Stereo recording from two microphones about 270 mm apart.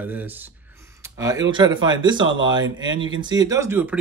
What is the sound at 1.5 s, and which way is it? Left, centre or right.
Speech, centre.